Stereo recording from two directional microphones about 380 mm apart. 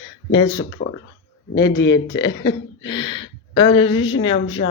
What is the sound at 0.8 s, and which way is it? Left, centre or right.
Speech, left.